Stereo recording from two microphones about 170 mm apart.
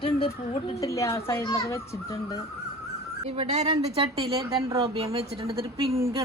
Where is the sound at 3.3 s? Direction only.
40° right (ahead or behind).